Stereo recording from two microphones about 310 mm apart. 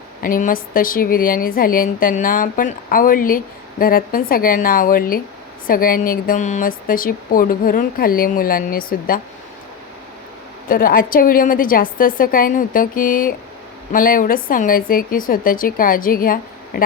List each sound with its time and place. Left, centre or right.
0.2 s speech: left
10.7 s speech: left